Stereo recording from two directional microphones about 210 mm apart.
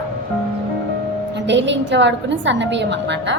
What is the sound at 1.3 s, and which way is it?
A woman's voice, 55° right (ahead or behind).